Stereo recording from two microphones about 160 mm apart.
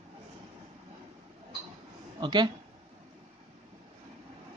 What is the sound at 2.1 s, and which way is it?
Speech, 25° right (ahead or behind).